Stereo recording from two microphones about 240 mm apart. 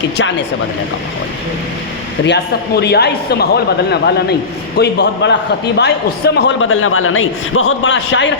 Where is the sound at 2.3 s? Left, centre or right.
Left.